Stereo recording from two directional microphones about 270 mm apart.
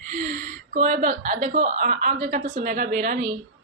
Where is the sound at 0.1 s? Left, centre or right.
Right.